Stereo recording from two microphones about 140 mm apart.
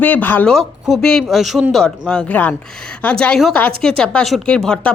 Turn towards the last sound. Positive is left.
turn(degrees=5)  # may be behind; listen again after turning